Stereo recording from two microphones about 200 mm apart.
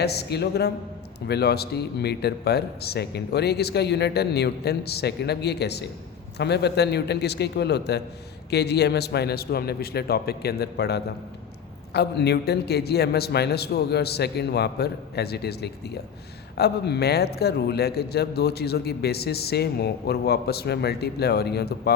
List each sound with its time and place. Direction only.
0.0 s a man's voice: 55° left (ahead or behind)